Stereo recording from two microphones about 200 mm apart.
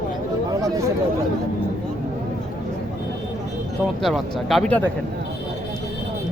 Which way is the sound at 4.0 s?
Centre (ahead or behind).